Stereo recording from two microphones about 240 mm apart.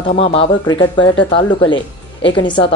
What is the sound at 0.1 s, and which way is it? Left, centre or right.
Speech, left.